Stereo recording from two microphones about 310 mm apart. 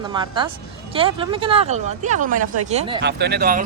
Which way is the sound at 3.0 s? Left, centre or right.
Right.